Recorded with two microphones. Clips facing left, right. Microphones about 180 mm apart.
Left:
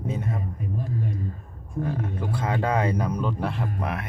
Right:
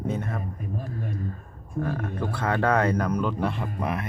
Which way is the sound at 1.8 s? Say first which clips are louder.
Even; 20° left (ahead or behind).